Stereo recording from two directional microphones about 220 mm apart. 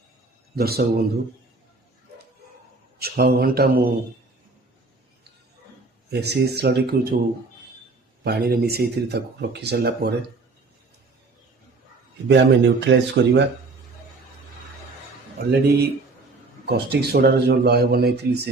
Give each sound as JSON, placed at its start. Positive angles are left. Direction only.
{"t": 0.5, "sound": "speech", "side_deg": -45}
{"t": 3.0, "sound": "speech", "side_deg": -45}
{"t": 6.1, "sound": "speech", "side_deg": -45}
{"t": 8.2, "sound": "speech", "side_deg": -45}
{"t": 12.3, "sound": "speech", "side_deg": -50}
{"t": 15.4, "sound": "speech", "side_deg": -45}